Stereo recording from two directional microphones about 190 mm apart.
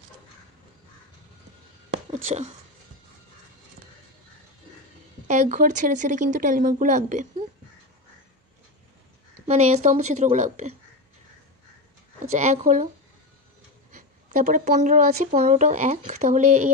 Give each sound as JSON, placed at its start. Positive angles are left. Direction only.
{"t": 2.0, "sound": "speech", "side_deg": -35}
{"t": 5.3, "sound": "speech", "side_deg": -40}
{"t": 9.5, "sound": "speech", "side_deg": -35}
{"t": 12.3, "sound": "speech", "side_deg": -40}
{"t": 13.9, "sound": "speech", "side_deg": -45}